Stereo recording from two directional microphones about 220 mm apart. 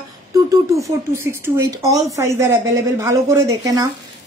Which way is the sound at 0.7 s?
10° right (ahead or behind).